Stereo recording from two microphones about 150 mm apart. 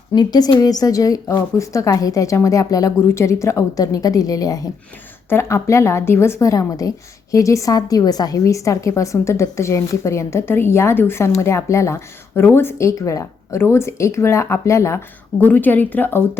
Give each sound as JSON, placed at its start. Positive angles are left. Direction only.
{"t": 0.1, "sound": "a woman's voice", "side_deg": 25}